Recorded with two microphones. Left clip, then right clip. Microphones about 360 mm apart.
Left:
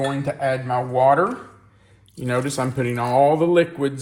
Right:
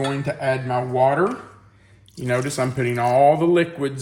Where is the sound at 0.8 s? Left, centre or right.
Centre.